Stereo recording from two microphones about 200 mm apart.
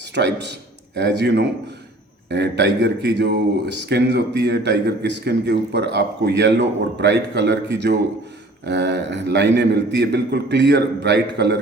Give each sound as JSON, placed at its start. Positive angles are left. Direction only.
{"t": 0.1, "sound": "a man's voice", "side_deg": -60}